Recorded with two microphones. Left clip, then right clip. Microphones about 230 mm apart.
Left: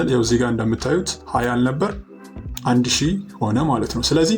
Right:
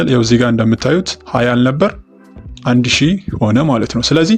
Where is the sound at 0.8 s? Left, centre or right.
Right.